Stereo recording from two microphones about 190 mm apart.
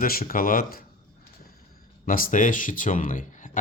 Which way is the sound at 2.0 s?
45° left (ahead or behind).